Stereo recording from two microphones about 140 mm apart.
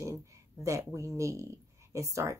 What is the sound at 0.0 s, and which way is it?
Speech, 20° right (ahead or behind).